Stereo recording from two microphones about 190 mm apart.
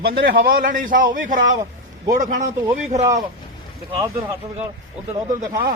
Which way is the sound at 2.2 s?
45° right (ahead or behind).